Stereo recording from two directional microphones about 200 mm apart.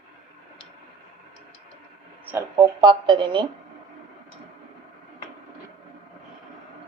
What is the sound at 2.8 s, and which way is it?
Speech, 25° right (ahead or behind).